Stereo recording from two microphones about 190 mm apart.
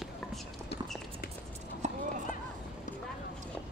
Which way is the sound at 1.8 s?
35° right (ahead or behind).